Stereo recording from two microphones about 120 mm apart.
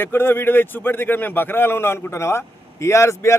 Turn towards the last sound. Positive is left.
turn(degrees=25)  # may be behind; listen again after turning